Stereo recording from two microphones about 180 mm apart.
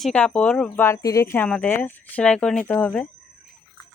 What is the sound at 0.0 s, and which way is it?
Speech, 5° left (ahead or behind).